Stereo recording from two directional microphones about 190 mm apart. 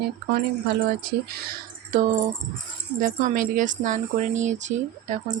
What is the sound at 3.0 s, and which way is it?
Speech, 45° right (ahead or behind).